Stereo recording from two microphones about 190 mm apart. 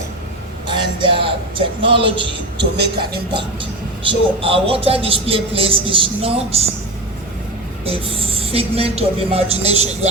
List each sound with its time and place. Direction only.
0.7 s speech: 25° right (ahead or behind)
2.6 s speech: 60° right (ahead or behind)
4.1 s speech: 30° right (ahead or behind)
7.9 s speech: 30° right (ahead or behind)